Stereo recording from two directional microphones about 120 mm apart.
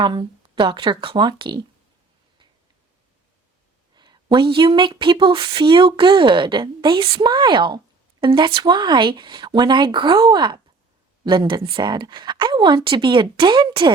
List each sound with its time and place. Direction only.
0.0 s speech: 40° right (ahead or behind)
3.9 s speech: 40° right (ahead or behind)